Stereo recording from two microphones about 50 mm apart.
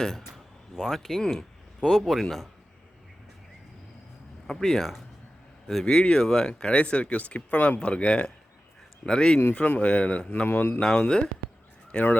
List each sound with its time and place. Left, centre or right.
0.8 s speech: centre
4.4 s speech: centre
5.8 s speech: centre
10.4 s speech: left
10.8 s speech: centre